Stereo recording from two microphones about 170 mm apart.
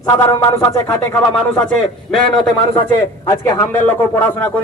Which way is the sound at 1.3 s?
5° left (ahead or behind).